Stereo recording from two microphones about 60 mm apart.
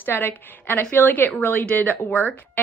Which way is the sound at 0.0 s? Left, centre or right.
Left.